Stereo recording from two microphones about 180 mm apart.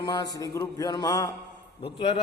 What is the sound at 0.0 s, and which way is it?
A man's voice, 25° left (ahead or behind).